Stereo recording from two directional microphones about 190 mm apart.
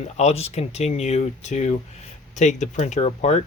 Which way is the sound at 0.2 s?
35° left (ahead or behind).